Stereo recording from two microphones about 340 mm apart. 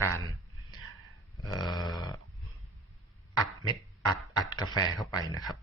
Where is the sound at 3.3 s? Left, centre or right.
Centre.